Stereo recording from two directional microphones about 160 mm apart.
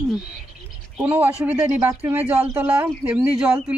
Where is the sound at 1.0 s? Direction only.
10° right (ahead or behind).